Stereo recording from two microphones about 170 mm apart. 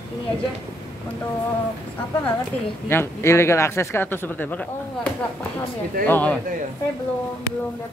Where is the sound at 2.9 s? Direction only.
15° left (ahead or behind).